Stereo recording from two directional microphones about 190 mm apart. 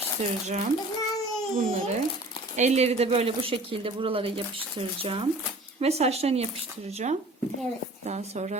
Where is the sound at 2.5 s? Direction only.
35° right (ahead or behind).